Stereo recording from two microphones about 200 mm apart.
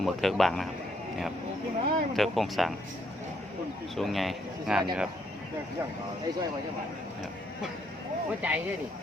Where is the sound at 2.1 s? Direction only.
Centre (ahead or behind).